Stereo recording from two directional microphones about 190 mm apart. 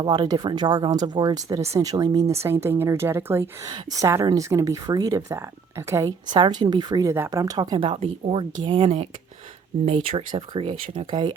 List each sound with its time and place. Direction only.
0.0 s a woman's voice: 25° right (ahead or behind)